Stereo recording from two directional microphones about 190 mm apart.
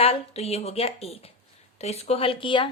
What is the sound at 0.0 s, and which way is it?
A woman's voice, 30° left (ahead or behind).